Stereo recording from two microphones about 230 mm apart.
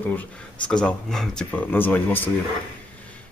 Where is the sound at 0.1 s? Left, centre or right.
Centre.